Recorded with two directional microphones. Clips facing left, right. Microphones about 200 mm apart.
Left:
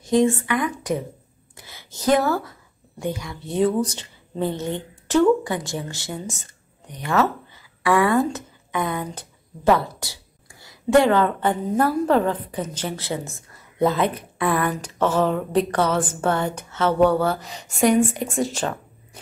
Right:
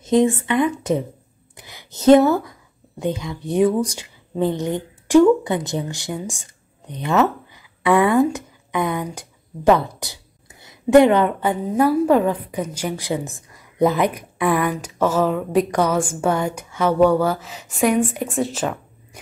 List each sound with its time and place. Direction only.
0.0 s a woman's voice: 20° right (ahead or behind); by 18.8 s 5° right (ahead or behind)